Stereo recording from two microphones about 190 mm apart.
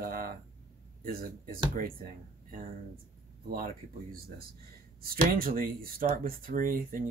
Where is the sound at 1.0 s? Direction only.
50° right (ahead or behind).